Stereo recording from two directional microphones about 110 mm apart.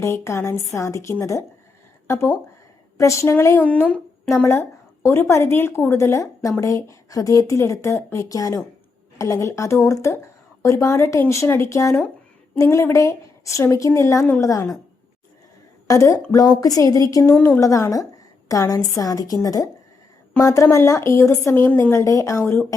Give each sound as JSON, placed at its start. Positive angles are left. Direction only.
{"t": 0.0, "sound": "speech", "side_deg": 25}
{"t": 5.0, "sound": "speech", "side_deg": 25}
{"t": 15.9, "sound": "a woman's voice", "side_deg": 30}
{"t": 17.3, "sound": "a woman's voice", "side_deg": 15}
{"t": 17.6, "sound": "a woman's voice", "side_deg": 30}
{"t": 22.0, "sound": "speech", "side_deg": 30}